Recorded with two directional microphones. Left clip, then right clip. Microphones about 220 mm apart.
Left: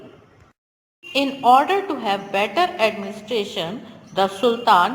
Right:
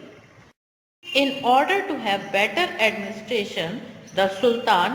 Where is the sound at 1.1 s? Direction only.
30° left (ahead or behind).